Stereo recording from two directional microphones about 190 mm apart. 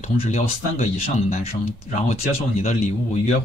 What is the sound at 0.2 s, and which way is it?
Speech, 35° left (ahead or behind).